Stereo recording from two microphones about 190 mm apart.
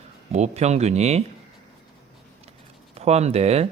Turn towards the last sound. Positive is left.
turn(degrees=-35)  # may be behind; listen again after turning